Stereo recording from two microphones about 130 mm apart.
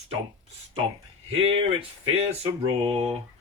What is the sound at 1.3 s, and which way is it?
Speech, 45° right (ahead or behind).